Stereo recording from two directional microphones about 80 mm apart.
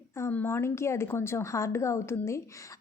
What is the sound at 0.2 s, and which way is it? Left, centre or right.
Speech, left.